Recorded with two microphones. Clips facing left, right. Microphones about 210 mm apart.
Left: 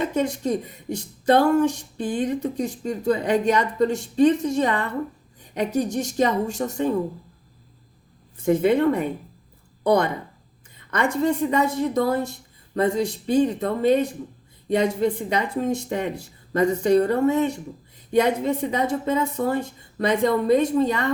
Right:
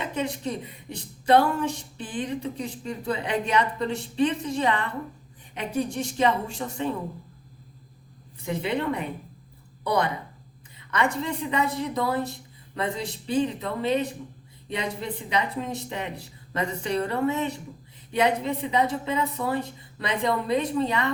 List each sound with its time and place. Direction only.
0.0 s speech: 45° left (ahead or behind)
8.4 s a woman's voice: 45° left (ahead or behind)